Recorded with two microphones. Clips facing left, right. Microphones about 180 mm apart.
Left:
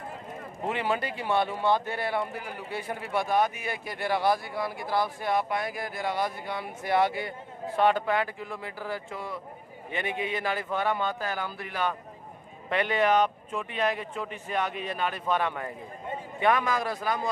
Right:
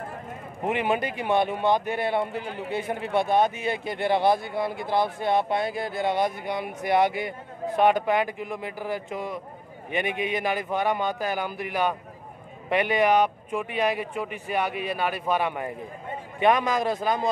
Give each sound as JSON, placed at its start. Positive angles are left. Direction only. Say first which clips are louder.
{"t": 0.7, "sound": "a man's voice", "louder": "right 4 dB", "side_deg": -20}